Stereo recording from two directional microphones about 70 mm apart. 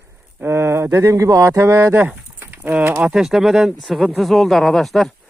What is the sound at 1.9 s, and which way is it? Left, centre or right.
Livestock, right.